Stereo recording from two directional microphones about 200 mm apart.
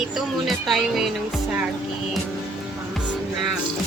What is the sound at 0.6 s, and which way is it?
Speech, centre (ahead or behind).